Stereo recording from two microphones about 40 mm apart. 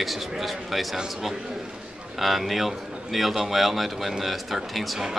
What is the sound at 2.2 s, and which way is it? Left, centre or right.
Speech, centre.